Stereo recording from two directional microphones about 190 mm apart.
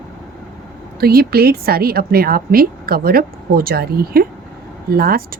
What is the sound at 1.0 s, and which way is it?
Speech, 55° right (ahead or behind).